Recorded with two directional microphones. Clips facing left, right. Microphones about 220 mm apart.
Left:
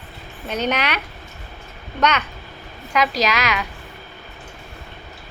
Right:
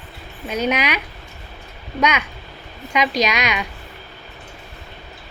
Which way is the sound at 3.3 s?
15° right (ahead or behind).